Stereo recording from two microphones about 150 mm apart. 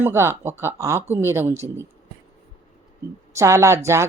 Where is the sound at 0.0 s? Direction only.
15° right (ahead or behind).